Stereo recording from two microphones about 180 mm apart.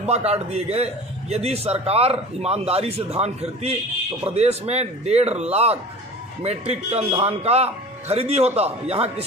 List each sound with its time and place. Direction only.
0.0 s a man's voice: 35° right (ahead or behind)